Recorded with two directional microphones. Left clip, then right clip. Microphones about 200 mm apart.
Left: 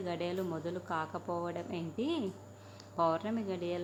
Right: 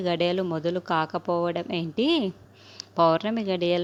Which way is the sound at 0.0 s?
40° right (ahead or behind).